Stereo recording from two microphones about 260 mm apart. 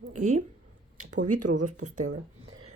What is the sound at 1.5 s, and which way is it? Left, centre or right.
Speech, right.